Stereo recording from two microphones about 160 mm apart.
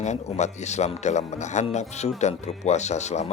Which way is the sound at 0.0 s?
45° left (ahead or behind).